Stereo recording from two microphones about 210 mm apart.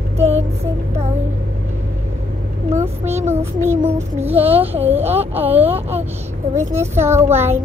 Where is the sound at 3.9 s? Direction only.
30° right (ahead or behind).